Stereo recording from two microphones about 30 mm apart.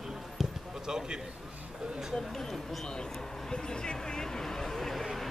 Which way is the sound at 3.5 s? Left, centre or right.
Left.